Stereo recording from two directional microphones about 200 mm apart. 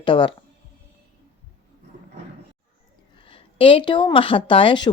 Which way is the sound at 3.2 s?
25° left (ahead or behind).